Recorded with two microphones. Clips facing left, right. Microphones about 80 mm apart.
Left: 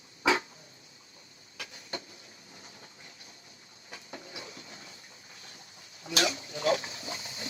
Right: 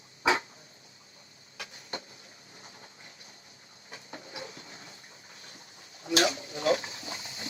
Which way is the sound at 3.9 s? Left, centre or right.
Right.